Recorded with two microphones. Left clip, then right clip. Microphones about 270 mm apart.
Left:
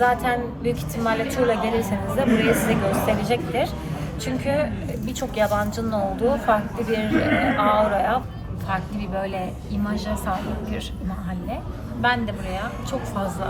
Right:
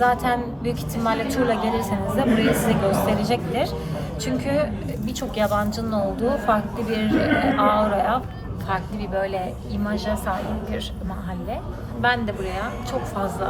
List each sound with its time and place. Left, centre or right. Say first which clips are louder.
0.0 s a woman's voice: even; centre
8.7 s a woman's voice: right 1 dB; centre
12.0 s a woman's voice: right 1 dB; centre